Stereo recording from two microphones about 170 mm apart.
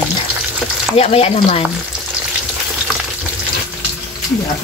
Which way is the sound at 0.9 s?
35° left (ahead or behind).